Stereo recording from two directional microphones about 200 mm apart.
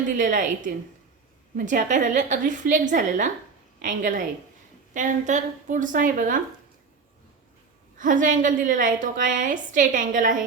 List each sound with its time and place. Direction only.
0.2 s a woman's voice: 40° right (ahead or behind)
7.9 s a woman's voice: 40° right (ahead or behind)